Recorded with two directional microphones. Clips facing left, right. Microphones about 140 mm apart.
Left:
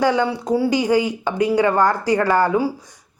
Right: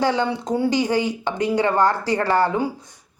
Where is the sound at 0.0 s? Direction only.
10° left (ahead or behind).